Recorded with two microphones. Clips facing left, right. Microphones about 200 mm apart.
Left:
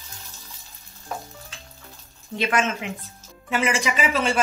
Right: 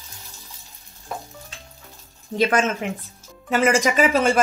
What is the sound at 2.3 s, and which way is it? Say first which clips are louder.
A woman's voice: right 4 dB; 40° right (ahead or behind).